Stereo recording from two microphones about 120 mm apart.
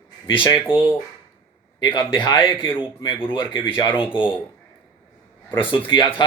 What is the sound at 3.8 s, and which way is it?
Speech, 45° left (ahead or behind).